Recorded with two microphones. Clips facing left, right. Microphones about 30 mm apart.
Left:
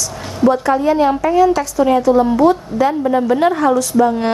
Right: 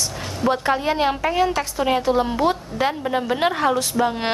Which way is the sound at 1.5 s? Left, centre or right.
Right.